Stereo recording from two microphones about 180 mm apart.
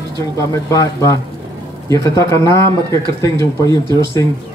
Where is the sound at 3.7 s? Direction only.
25° right (ahead or behind).